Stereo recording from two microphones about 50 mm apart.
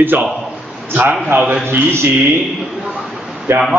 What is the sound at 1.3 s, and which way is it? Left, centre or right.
Speech, right.